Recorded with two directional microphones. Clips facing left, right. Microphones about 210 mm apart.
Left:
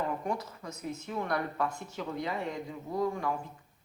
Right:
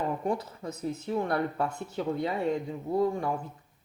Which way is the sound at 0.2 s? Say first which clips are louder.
Right 4 dB; 30° right (ahead or behind).